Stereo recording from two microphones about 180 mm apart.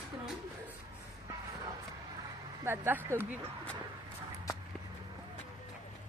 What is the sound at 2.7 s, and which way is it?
Speech, 15° right (ahead or behind).